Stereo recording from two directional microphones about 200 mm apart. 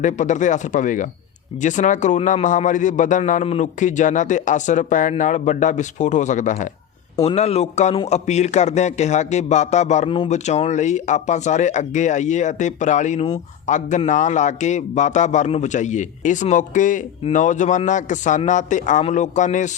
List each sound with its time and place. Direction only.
0.0 s speech: 40° left (ahead or behind)